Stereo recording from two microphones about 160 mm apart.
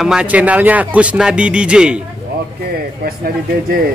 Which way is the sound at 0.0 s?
5° right (ahead or behind).